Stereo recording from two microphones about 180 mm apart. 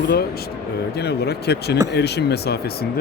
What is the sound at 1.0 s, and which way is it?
Speech, 65° left (ahead or behind).